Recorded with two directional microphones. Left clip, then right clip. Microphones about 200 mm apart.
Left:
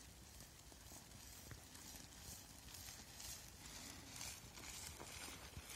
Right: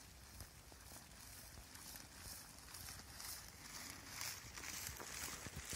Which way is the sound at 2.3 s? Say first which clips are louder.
Right 2 dB; 10° left (ahead or behind).